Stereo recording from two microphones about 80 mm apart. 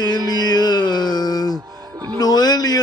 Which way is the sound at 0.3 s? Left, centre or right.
Left.